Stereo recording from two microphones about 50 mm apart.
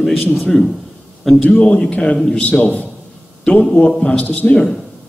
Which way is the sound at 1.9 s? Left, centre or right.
Centre.